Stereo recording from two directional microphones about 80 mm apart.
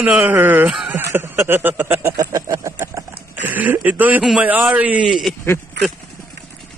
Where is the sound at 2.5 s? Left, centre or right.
Right.